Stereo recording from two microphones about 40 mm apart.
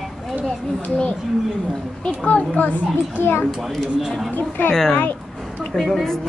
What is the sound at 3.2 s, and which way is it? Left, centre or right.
Speech, left.